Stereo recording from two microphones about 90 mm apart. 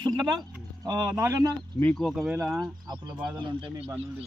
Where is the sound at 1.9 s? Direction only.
Centre (ahead or behind).